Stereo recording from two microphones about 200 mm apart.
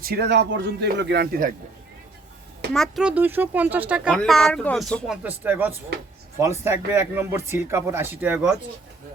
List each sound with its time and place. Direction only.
0.0 s a man's voice: 55° right (ahead or behind)
2.7 s a man's voice: centre (ahead or behind)